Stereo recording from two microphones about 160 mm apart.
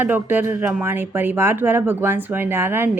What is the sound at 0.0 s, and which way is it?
A woman's voice, 10° right (ahead or behind).